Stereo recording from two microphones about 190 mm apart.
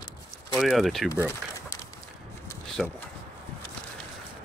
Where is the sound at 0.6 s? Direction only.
Centre (ahead or behind).